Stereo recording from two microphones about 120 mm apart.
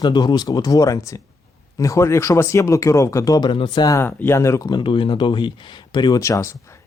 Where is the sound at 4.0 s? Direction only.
20° left (ahead or behind); by 6.2 s 40° left (ahead or behind).